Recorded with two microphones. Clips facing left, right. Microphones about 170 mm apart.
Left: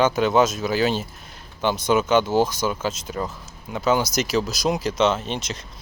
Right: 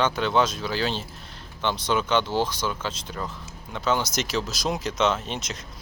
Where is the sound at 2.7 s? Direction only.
10° left (ahead or behind).